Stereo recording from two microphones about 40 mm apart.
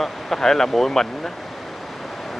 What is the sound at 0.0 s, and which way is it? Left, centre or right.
Speech, centre.